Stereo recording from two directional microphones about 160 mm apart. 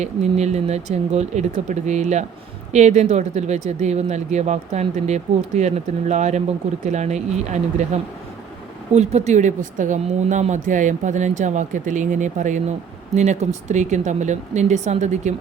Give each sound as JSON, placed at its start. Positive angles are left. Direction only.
{"t": 0.0, "sound": "speech", "side_deg": -45}
{"t": 9.0, "sound": "speech", "side_deg": -45}